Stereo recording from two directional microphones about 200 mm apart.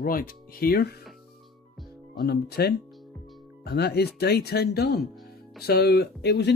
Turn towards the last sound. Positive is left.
turn(degrees=55)  # may be behind; listen again after turning